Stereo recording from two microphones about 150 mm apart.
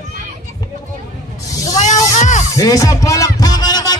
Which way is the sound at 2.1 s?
55° left (ahead or behind).